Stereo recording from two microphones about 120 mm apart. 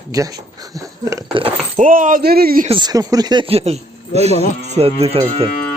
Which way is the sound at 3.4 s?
60° right (ahead or behind).